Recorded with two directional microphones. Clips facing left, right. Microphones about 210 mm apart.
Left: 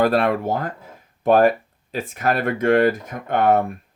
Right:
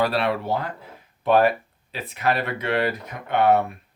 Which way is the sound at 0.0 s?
50° left (ahead or behind).